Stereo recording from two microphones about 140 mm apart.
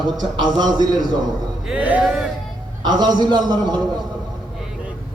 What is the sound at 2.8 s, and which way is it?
Speech, 30° right (ahead or behind).